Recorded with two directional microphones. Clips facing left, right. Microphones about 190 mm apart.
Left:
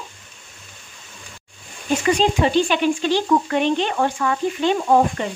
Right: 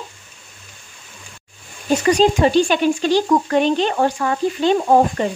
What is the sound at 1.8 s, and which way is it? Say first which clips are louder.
Speech: right 4 dB; 40° right (ahead or behind).